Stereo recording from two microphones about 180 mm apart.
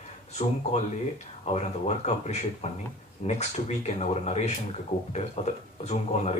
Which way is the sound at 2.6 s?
35° left (ahead or behind).